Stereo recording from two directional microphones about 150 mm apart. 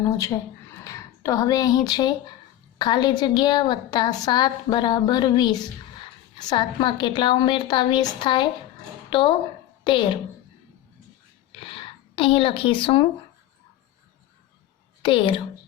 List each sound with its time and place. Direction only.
0.0 s a woman's voice: 20° left (ahead or behind)
11.6 s a sound: 35° left (ahead or behind)
15.0 s a woman's voice: 35° left (ahead or behind)